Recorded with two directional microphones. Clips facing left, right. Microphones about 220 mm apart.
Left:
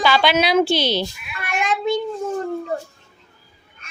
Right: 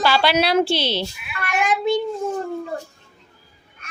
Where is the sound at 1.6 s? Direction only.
10° right (ahead or behind).